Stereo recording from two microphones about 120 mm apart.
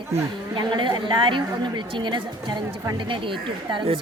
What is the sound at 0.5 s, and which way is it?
A woman's voice, 40° right (ahead or behind).